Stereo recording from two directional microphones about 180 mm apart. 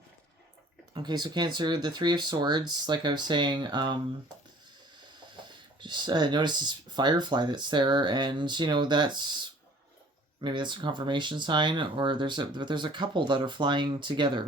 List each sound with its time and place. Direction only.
0.9 s speech: 25° right (ahead or behind)
5.5 s speech: 25° right (ahead or behind)